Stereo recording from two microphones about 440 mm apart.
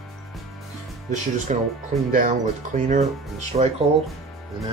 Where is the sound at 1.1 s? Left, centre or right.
Centre.